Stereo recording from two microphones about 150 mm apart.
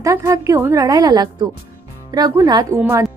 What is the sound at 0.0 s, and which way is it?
A woman's voice, 20° right (ahead or behind).